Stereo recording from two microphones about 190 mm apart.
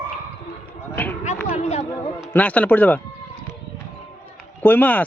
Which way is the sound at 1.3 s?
40° left (ahead or behind).